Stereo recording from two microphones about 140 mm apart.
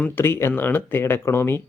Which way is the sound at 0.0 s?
15° left (ahead or behind).